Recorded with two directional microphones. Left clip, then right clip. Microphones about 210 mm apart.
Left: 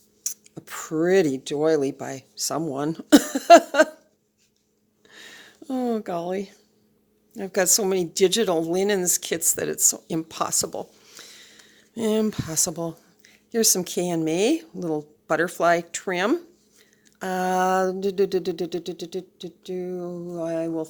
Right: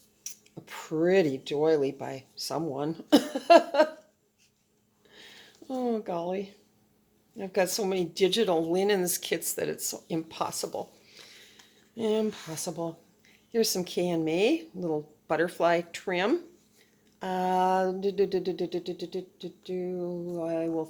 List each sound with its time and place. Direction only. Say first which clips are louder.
0.2 s speech: left 9 dB; 40° left (ahead or behind)
5.0 s a sound: left 6 dB; 40° left (ahead or behind)
7.3 s speech: left 5 dB; 40° left (ahead or behind)